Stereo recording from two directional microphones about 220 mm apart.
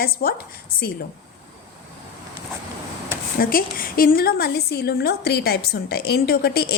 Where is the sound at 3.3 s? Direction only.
40° left (ahead or behind).